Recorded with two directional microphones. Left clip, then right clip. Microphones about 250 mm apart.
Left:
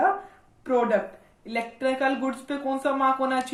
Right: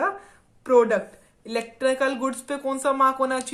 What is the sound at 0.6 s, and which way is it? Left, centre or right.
Speech, right.